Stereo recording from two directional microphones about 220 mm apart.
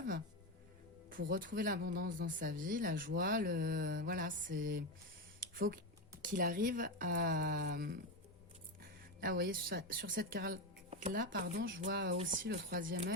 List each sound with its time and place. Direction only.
1.3 s speech: 40° right (ahead or behind)
9.2 s speech: 40° right (ahead or behind)
12.4 s speech: 50° right (ahead or behind)